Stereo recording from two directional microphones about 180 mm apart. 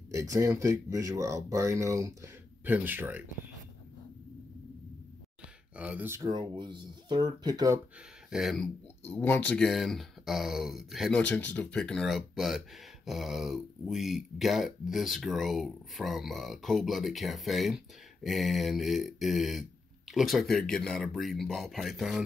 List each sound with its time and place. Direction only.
0.1 s speech: 15° right (ahead or behind)
5.8 s speech: 10° right (ahead or behind)
8.3 s speech: centre (ahead or behind)
9.1 s speech: 10° left (ahead or behind)